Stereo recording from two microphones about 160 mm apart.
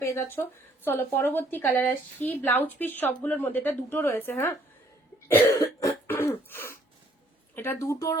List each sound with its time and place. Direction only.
0.0 s speech: 15° left (ahead or behind)
5.5 s cough: 20° left (ahead or behind)
7.5 s speech: 15° left (ahead or behind)